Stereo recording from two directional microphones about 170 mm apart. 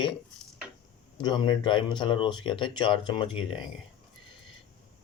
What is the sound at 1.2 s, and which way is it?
Speech, 25° left (ahead or behind).